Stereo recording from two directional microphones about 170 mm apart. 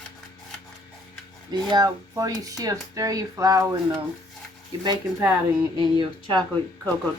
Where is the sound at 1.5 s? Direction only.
25° right (ahead or behind).